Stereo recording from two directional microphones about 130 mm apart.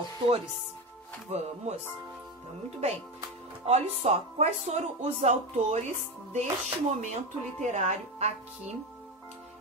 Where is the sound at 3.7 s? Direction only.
55° right (ahead or behind).